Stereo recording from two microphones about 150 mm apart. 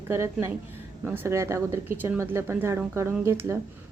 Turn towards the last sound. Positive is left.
turn(degrees=-20)  # may be behind; listen again after turning